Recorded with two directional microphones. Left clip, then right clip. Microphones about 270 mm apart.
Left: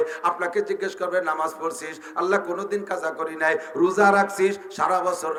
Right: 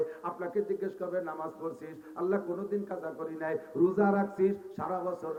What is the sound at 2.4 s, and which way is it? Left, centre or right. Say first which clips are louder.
Speech: left 8 dB; centre.